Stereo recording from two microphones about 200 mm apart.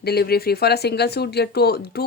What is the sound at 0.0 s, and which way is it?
Speech, 50° left (ahead or behind).